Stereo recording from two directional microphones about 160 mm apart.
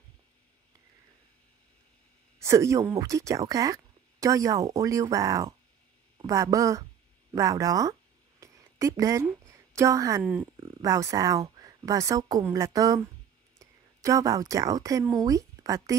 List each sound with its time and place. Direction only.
2.4 s a woman's voice: 20° right (ahead or behind)